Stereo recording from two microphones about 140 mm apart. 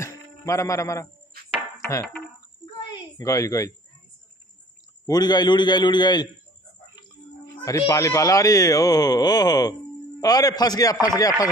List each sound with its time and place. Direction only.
0.5 s speech: 20° left (ahead or behind)
1.3 s chopping: 90° right
2.9 s a woman's voice: 25° left (ahead or behind)
5.0 s a man's voice: 30° left (ahead or behind)
7.6 s speech: 25° left (ahead or behind)